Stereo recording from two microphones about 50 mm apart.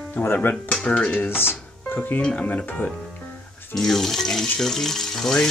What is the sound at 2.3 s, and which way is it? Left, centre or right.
Speech, left.